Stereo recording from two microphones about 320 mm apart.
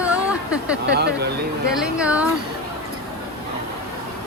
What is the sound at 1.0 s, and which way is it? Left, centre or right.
Speech, right.